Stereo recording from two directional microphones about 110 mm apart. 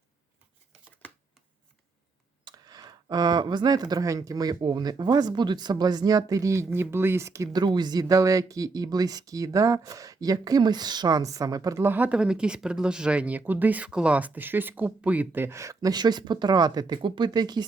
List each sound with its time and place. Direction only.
2.4 s speech: 40° right (ahead or behind)
11.8 s speech: 15° right (ahead or behind); by 17.7 s 40° right (ahead or behind)